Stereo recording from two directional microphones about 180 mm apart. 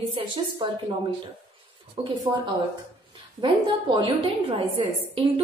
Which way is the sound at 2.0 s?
30° right (ahead or behind).